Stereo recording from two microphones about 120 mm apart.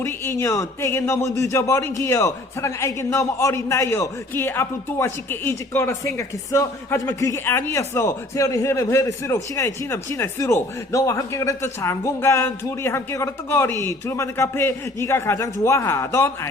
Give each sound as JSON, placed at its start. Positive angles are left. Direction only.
{"t": 0.0, "sound": "a man's voice", "side_deg": 25}